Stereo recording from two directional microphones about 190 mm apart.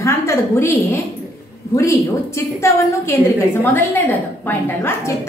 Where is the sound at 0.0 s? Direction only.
15° left (ahead or behind).